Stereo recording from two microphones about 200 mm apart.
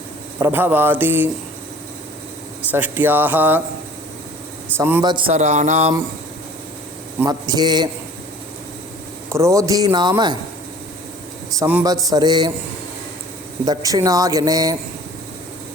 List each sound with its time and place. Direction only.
0.3 s speech: 10° right (ahead or behind)
2.7 s speech: 10° right (ahead or behind)
4.8 s speech: 10° right (ahead or behind)
5.1 s a sound: 30° right (ahead or behind)
7.2 s a man's voice: 20° right (ahead or behind)
9.3 s speech: 15° right (ahead or behind)
11.6 s a man's voice: 15° right (ahead or behind)
13.7 s speech: 15° right (ahead or behind)